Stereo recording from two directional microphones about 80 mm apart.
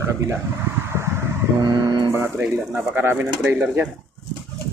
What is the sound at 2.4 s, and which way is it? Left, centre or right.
Speech, right.